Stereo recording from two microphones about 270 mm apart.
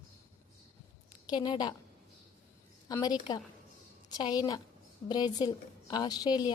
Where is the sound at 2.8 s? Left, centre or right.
Centre.